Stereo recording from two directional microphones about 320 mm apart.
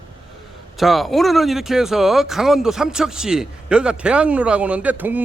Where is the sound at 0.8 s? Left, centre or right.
Centre.